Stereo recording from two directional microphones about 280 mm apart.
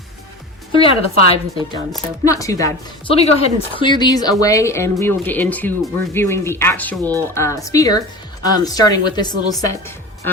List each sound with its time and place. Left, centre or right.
0.7 s a woman's voice: centre